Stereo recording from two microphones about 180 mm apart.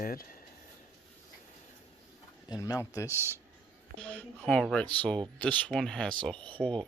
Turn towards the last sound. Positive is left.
turn(degrees=0)  # may be behind; listen again after turning